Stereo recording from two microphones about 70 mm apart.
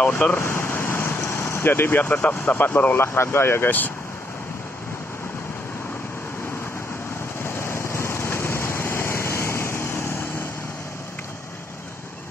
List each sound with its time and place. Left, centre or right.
0.0 s speech: left
3.0 s speech: left
7.4 s vehicle: left